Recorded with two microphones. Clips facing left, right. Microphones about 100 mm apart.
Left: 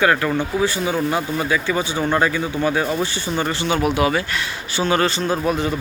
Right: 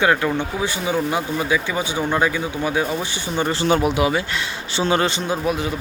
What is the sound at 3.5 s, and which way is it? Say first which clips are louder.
Speech: right 3 dB; 35° right (ahead or behind).